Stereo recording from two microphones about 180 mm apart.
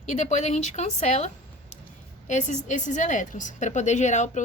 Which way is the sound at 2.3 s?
40° left (ahead or behind).